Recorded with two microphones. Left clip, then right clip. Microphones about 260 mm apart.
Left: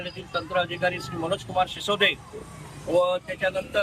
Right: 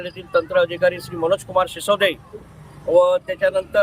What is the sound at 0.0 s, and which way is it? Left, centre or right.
Speech, centre.